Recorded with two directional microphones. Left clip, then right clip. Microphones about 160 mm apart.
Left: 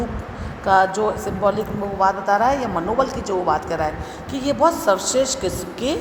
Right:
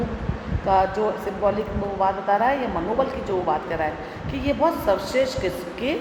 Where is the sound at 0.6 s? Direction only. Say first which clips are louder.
Left 4 dB; 30° left (ahead or behind).